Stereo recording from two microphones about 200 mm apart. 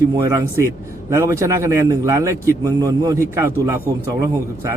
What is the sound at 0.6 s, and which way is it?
A man's voice, 15° right (ahead or behind).